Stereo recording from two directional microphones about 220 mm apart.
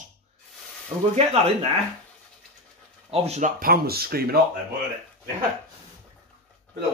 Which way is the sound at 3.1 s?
30° right (ahead or behind).